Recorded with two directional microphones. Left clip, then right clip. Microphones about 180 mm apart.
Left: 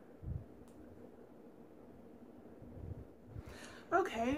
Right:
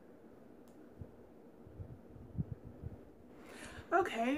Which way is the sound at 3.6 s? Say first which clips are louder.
Right 1 dB; centre (ahead or behind).